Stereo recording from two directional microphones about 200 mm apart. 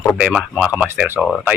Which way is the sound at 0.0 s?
5° right (ahead or behind).